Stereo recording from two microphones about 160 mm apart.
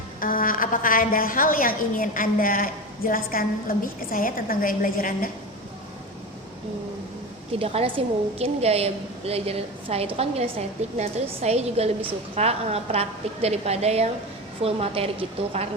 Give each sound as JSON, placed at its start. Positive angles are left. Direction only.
{"t": 0.2, "sound": "a woman's voice", "side_deg": 60}
{"t": 7.6, "sound": "a woman's voice", "side_deg": -35}